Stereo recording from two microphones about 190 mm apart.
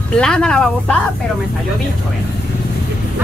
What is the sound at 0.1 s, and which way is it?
Speech, 5° left (ahead or behind).